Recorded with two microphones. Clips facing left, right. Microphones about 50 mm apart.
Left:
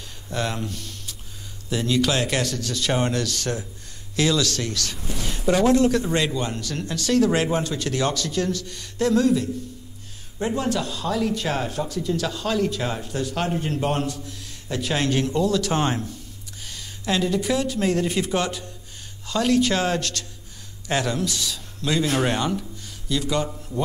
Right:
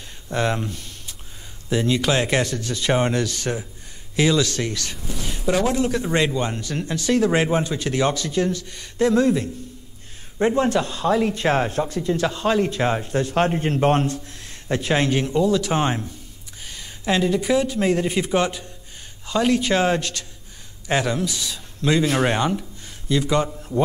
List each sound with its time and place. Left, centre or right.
0.3 s a man's voice: right
15.0 s a man's voice: centre
21.5 s speech: right